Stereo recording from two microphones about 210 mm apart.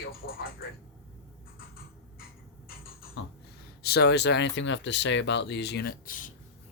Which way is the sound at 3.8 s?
50° left (ahead or behind).